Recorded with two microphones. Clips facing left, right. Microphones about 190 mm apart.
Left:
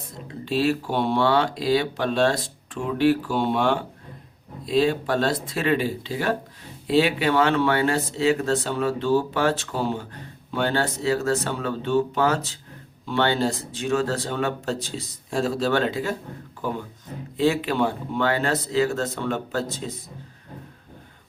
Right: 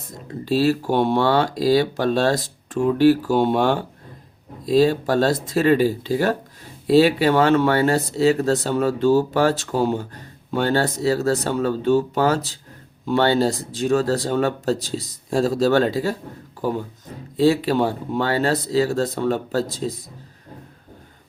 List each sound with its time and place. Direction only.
0.4 s speech: 40° right (ahead or behind)
17.3 s speech: 35° right (ahead or behind)